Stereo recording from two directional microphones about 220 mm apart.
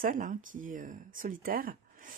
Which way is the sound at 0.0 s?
35° right (ahead or behind).